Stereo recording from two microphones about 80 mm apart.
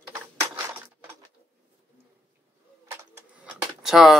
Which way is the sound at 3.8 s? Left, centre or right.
Centre.